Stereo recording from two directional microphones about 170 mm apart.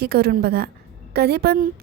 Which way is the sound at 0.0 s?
65° right (ahead or behind).